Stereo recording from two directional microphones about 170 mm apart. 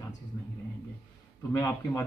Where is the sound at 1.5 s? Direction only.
20° left (ahead or behind).